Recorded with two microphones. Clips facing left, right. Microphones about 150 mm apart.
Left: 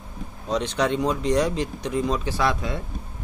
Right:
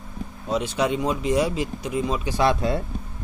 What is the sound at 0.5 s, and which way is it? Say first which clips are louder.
Speech: even; 5° right (ahead or behind).